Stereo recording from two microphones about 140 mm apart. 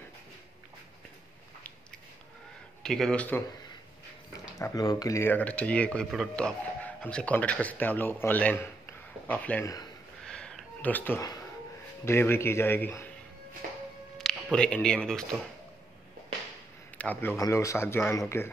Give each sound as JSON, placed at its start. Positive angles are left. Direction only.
{"t": 2.8, "sound": "speech", "side_deg": 5}
{"t": 4.3, "sound": "speech", "side_deg": 25}
{"t": 10.2, "sound": "a sound", "side_deg": 5}
{"t": 12.0, "sound": "speech", "side_deg": 20}
{"t": 14.1, "sound": "speech", "side_deg": 5}
{"t": 17.0, "sound": "speech", "side_deg": 15}